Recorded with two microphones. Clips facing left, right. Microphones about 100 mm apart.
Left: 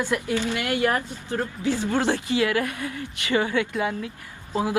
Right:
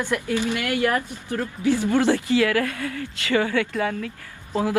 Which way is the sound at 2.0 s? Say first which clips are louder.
Right 3 dB; 20° left (ahead or behind).